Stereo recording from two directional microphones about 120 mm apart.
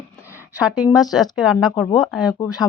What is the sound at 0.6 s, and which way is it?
Speech, 5° right (ahead or behind).